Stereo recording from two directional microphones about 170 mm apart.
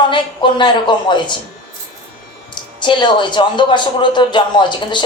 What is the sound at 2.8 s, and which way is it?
Speech, 25° left (ahead or behind).